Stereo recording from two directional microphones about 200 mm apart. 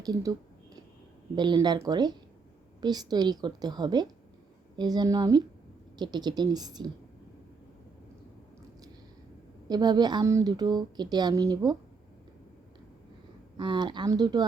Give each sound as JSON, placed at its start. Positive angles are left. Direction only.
{"t": 0.0, "sound": "a sound", "side_deg": -20}
{"t": 1.4, "sound": "a woman's voice", "side_deg": -20}
{"t": 9.6, "sound": "a woman's voice", "side_deg": -20}
{"t": 13.6, "sound": "a woman's voice", "side_deg": -25}